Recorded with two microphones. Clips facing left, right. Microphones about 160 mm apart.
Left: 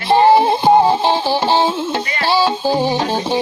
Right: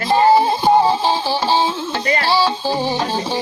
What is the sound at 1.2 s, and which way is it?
Speech, 25° left (ahead or behind).